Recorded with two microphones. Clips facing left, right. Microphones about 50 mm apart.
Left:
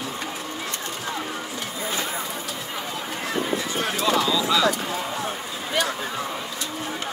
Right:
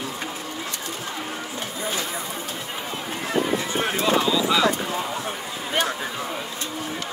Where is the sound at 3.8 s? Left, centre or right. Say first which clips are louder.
Right 1 dB; right.